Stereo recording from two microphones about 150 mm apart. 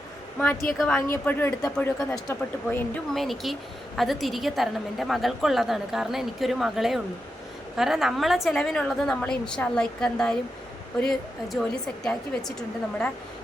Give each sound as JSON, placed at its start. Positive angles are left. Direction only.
{"t": 0.3, "sound": "a woman's voice", "side_deg": 15}
{"t": 2.1, "sound": "speech", "side_deg": 20}
{"t": 3.2, "sound": "a woman's voice", "side_deg": 0}